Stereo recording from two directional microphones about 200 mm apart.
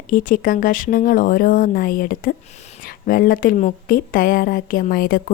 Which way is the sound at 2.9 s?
50° left (ahead or behind).